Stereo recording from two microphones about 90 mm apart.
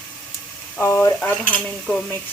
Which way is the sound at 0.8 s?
30° left (ahead or behind).